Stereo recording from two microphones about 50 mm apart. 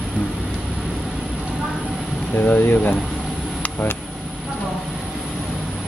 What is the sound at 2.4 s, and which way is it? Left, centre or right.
Speech, left.